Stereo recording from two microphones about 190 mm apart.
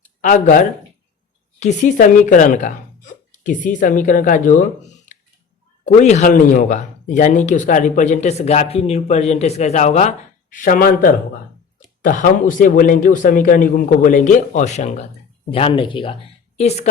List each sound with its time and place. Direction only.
0.2 s speech: 40° left (ahead or behind)
5.8 s speech: 40° left (ahead or behind)